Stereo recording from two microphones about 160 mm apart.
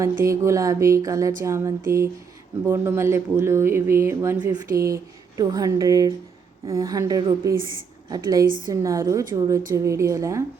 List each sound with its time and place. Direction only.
0.0 s music: 20° right (ahead or behind)
1.4 s speech: 20° right (ahead or behind)
5.4 s music: 25° right (ahead or behind)